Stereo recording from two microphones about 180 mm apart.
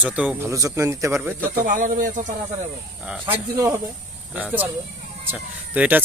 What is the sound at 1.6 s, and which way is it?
Speech, 45° right (ahead or behind).